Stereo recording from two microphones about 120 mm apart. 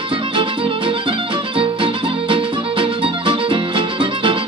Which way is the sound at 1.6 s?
45° right (ahead or behind).